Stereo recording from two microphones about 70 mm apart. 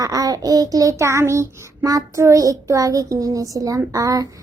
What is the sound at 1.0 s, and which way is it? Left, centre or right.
Speech, right.